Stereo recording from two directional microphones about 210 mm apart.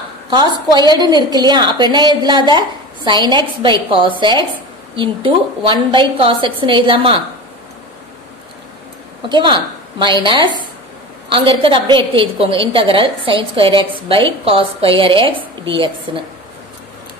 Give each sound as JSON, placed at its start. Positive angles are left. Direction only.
{"t": 0.3, "sound": "a woman's voice", "side_deg": -20}
{"t": 9.3, "sound": "a woman's voice", "side_deg": -25}